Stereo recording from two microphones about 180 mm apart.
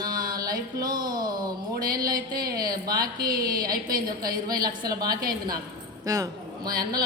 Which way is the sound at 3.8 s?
50° right (ahead or behind).